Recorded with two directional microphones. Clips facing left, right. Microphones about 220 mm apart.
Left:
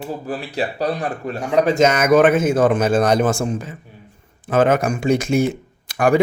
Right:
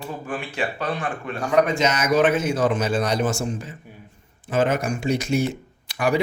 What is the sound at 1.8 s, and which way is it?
A man's voice, 55° left (ahead or behind).